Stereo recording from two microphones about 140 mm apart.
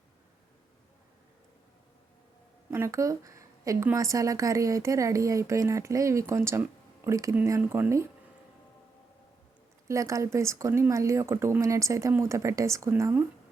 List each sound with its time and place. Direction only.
2.6 s a woman's voice: 20° right (ahead or behind)
9.9 s speech: 20° right (ahead or behind)